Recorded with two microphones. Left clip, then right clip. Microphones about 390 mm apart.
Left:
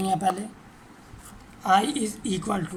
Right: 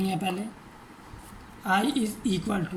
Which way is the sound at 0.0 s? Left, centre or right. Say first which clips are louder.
Left 6 dB; centre.